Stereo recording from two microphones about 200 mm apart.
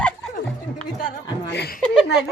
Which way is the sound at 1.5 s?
55° left (ahead or behind).